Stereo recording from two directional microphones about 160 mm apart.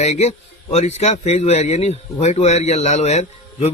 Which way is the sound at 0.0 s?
45° left (ahead or behind).